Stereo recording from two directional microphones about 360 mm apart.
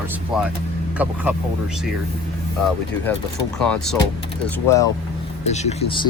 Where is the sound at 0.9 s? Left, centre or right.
Centre.